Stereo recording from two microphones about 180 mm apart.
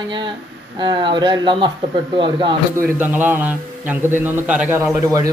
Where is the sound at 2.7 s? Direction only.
15° right (ahead or behind).